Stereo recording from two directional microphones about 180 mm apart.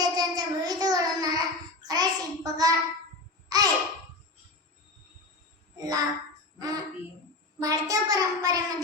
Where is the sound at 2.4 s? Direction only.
20° right (ahead or behind).